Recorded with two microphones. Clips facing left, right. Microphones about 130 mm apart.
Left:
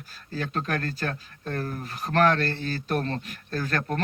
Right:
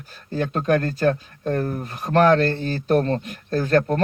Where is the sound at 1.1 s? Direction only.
40° right (ahead or behind).